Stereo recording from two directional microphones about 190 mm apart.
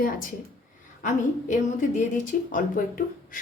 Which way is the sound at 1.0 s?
40° left (ahead or behind).